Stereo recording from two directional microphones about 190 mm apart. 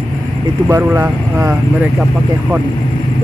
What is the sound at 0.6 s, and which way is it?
Speech, 10° right (ahead or behind).